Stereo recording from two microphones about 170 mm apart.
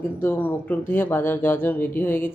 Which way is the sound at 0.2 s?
10° left (ahead or behind).